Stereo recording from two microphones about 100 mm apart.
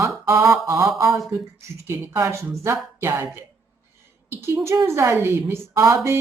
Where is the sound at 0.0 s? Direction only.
25° right (ahead or behind).